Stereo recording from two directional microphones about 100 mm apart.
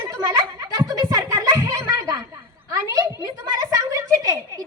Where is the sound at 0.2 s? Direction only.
40° right (ahead or behind).